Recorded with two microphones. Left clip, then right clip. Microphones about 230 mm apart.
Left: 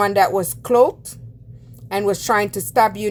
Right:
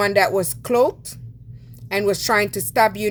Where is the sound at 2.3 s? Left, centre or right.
Right.